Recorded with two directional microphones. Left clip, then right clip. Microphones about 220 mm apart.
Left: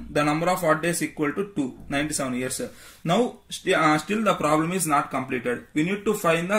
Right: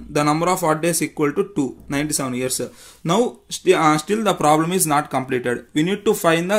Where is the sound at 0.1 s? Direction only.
55° right (ahead or behind).